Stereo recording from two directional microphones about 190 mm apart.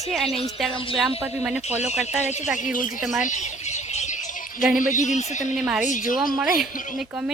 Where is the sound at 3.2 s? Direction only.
40° left (ahead or behind).